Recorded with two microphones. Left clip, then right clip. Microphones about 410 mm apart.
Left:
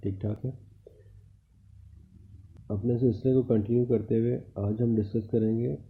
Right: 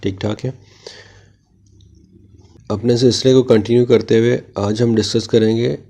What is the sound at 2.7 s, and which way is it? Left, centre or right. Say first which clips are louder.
Speech: right 14 dB; right.